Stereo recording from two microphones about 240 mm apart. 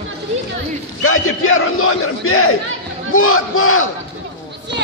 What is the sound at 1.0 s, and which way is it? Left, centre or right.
A man's voice, left.